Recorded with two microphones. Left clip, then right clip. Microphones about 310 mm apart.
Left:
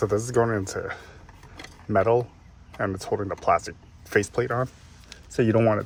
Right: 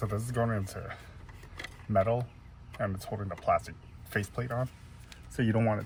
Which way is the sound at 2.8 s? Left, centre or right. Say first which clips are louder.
Left 9 dB; centre.